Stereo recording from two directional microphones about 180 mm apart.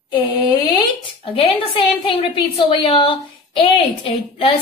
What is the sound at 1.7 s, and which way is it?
A woman's voice, 30° left (ahead or behind).